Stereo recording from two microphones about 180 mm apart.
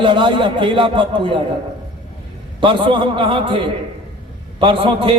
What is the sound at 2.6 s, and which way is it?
A man's voice, 30° right (ahead or behind).